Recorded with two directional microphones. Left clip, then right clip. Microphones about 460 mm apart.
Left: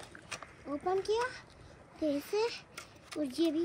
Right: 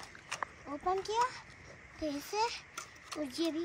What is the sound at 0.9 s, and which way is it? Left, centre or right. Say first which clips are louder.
A child's voice: even; centre.